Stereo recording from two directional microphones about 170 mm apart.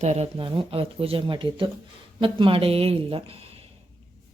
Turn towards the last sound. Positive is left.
turn(degrees=-35)  # may be behind; listen again after turning